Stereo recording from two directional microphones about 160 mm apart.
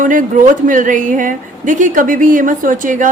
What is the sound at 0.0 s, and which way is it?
A woman's voice, 55° right (ahead or behind).